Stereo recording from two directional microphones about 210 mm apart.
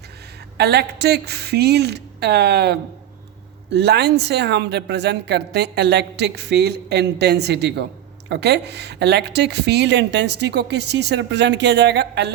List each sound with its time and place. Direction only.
0.5 s a woman's voice: 50° right (ahead or behind)